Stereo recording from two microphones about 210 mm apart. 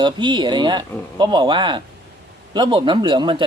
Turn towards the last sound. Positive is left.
turn(degrees=-25)  # may be behind; listen again after turning